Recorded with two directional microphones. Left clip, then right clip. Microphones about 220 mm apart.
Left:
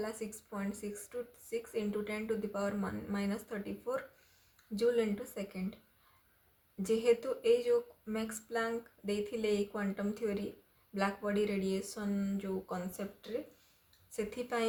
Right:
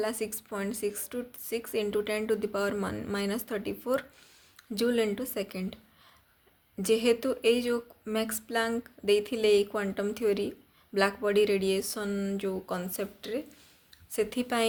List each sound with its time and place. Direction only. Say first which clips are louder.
0.0 s speech: right 8 dB; 40° right (ahead or behind)
6.8 s speech: right 5 dB; 40° right (ahead or behind)